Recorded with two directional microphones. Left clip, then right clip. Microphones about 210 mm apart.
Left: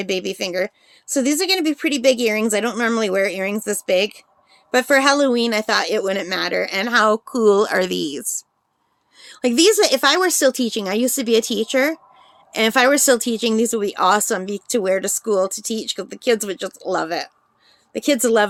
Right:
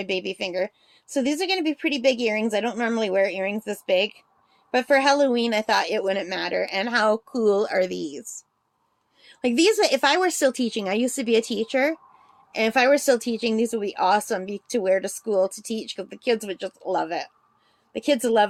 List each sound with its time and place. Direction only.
0.0 s speech: 30° left (ahead or behind)
9.1 s speech: 30° left (ahead or behind)